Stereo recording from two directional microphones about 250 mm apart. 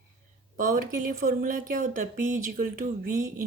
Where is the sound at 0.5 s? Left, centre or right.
Right.